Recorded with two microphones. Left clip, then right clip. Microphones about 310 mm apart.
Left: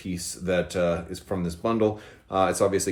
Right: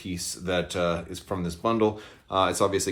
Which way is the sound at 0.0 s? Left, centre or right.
Centre.